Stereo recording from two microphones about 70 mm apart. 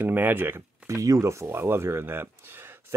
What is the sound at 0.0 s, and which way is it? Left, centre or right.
Speech, right.